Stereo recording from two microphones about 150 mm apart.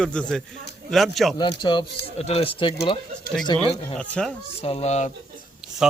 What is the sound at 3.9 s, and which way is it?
Speech, 5° left (ahead or behind).